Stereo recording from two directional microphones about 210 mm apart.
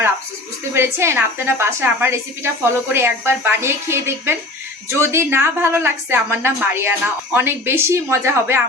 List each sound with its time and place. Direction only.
0.7 s a woman's voice: 10° right (ahead or behind)